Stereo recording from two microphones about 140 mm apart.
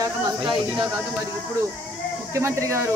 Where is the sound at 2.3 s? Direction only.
20° right (ahead or behind).